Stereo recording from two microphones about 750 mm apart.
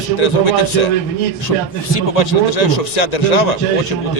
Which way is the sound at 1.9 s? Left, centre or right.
Left.